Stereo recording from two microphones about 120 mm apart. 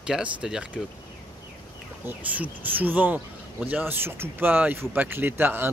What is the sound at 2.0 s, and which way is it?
Speech, 15° right (ahead or behind).